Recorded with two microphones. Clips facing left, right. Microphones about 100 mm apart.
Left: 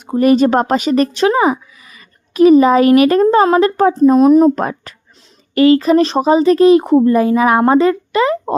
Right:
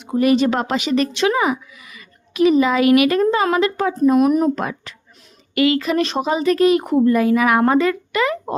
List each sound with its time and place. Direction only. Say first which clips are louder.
0.0 s speech: left 5 dB; 40° left (ahead or behind)
4.5 s speech: left 5 dB; 40° left (ahead or behind)